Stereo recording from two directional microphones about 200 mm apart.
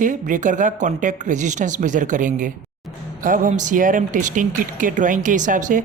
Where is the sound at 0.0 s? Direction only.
40° right (ahead or behind).